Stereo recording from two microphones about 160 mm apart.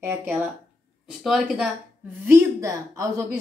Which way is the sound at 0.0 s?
15° right (ahead or behind).